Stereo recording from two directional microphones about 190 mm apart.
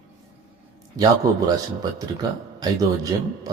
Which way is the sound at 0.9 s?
20° right (ahead or behind).